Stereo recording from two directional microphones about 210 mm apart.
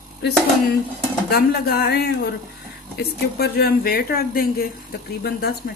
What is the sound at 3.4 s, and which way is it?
Speech, 45° left (ahead or behind).